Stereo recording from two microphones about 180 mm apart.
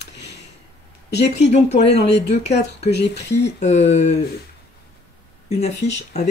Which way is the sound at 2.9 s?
70° left (ahead or behind).